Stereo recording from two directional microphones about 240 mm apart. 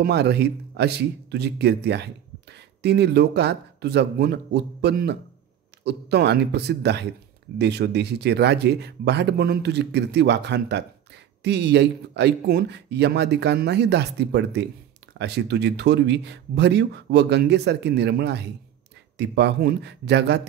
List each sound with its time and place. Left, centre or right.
0.0 s speech: right